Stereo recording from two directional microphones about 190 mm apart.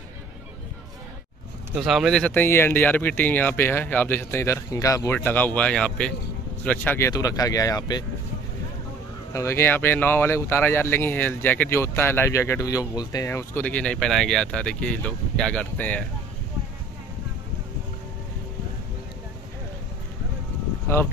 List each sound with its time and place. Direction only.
1.8 s speech: centre (ahead or behind); by 8.0 s 20° left (ahead or behind)
9.3 s speech: 15° left (ahead or behind)